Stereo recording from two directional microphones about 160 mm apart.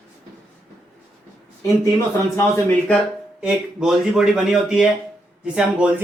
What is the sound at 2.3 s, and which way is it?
Speech, 15° left (ahead or behind).